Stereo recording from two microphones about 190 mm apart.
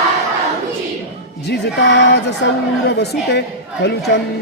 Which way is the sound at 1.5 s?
60° left (ahead or behind).